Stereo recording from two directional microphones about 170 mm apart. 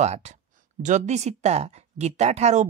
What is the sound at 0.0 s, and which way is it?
Speech, 40° right (ahead or behind).